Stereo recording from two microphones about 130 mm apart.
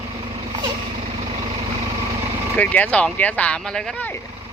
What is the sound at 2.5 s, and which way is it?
Speech, 10° left (ahead or behind).